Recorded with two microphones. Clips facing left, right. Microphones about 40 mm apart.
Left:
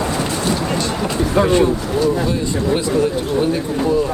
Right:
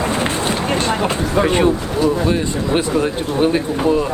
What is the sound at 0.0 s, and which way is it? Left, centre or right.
Run, right.